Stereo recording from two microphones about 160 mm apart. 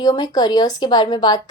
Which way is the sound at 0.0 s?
25° left (ahead or behind).